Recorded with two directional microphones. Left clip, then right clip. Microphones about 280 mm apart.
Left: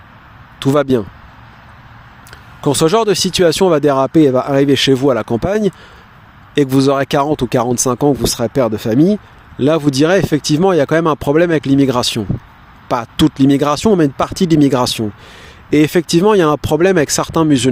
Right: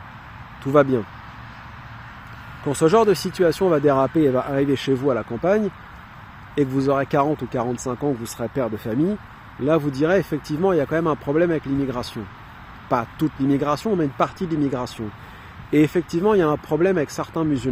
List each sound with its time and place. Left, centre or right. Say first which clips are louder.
0.6 s speech: left 4 dB; left
2.6 s speech: left 4 dB; left